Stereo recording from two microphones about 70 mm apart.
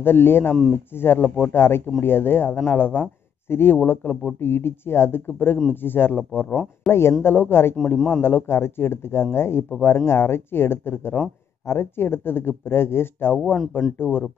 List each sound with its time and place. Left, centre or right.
0.0 s a man's voice: left
6.5 s speech: centre
6.9 s speech: left
13.6 s speech: centre
13.9 s speech: left